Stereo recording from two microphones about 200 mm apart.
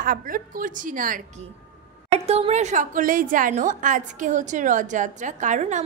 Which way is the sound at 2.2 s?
30° right (ahead or behind).